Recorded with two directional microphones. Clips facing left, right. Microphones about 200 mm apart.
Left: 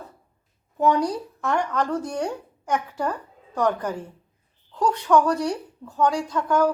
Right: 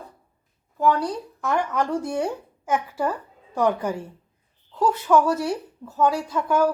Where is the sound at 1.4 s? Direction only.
Centre (ahead or behind).